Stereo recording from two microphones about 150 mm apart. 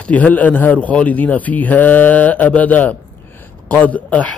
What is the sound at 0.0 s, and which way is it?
A man's voice, 10° left (ahead or behind).